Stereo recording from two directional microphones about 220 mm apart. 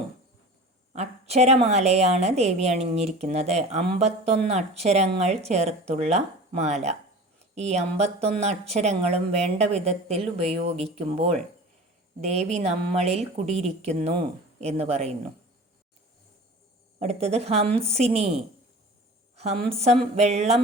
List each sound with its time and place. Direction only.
0.9 s speech: 30° right (ahead or behind)
17.0 s speech: 30° right (ahead or behind)